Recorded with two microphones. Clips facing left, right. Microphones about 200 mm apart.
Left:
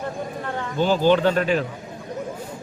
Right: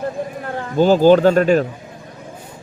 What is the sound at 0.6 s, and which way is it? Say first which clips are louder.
Speech: right 7 dB; 40° right (ahead or behind).